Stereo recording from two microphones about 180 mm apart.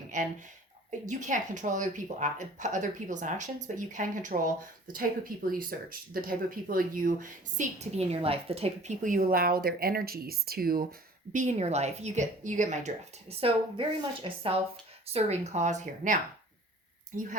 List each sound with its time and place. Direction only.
0.1 s speech: 45° right (ahead or behind)
11.3 s a woman's voice: 40° right (ahead or behind)
17.1 s speech: 45° right (ahead or behind)